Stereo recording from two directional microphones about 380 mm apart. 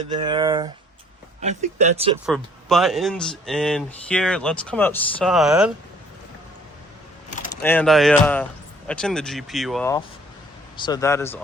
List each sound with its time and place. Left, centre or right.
0.1 s speech: centre
2.2 s speech: centre
7.6 s speech: centre